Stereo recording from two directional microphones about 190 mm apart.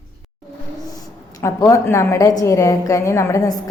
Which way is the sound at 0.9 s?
20° left (ahead or behind).